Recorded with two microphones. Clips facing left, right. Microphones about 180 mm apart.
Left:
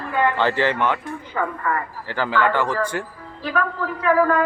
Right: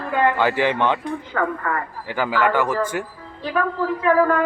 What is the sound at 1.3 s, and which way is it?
Speech, 70° right (ahead or behind).